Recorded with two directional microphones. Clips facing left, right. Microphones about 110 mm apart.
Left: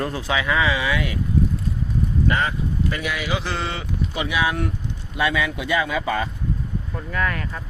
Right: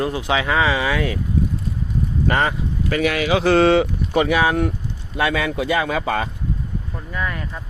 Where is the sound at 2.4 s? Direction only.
80° right.